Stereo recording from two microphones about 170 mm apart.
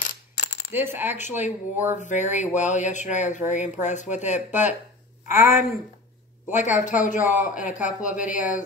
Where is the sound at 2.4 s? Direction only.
45° left (ahead or behind).